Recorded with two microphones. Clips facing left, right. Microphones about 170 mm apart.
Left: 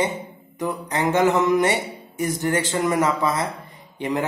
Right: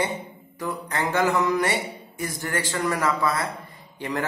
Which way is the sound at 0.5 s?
20° left (ahead or behind).